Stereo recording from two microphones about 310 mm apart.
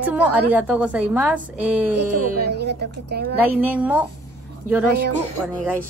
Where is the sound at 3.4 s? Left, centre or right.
Centre.